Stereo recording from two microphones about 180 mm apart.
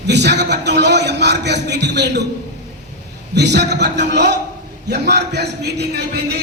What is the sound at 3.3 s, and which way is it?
A man's voice, 70° right (ahead or behind).